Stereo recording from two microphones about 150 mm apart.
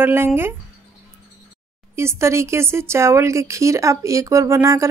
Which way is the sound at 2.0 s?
20° right (ahead or behind).